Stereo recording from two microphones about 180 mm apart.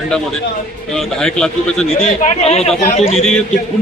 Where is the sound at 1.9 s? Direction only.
35° left (ahead or behind).